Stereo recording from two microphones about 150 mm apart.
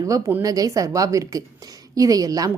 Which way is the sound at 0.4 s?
25° right (ahead or behind).